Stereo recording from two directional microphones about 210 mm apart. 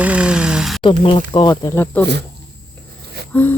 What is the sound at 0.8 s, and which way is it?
Speech, 25° left (ahead or behind).